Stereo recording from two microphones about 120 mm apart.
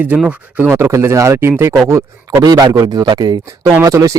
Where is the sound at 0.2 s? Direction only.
10° right (ahead or behind).